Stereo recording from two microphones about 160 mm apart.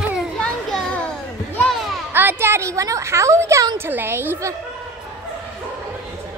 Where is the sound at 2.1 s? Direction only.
15° right (ahead or behind).